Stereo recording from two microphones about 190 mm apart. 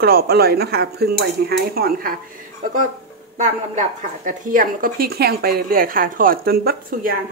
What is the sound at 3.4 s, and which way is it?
A woman's voice, 45° right (ahead or behind).